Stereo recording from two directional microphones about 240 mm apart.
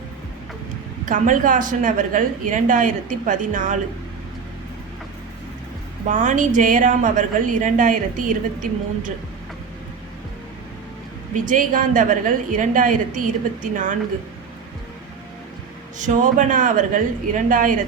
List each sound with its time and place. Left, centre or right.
1.0 s a woman's voice: right
6.1 s a woman's voice: right
11.3 s a woman's voice: right
16.0 s a woman's voice: right